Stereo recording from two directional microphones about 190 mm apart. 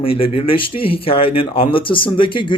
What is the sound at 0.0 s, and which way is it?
A man's voice, 30° left (ahead or behind).